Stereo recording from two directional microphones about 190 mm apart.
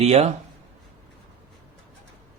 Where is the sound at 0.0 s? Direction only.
35° right (ahead or behind).